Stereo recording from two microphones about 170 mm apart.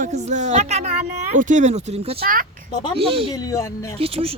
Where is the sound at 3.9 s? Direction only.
35° right (ahead or behind).